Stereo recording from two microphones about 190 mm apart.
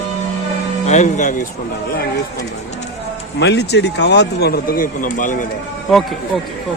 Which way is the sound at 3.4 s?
65° left (ahead or behind).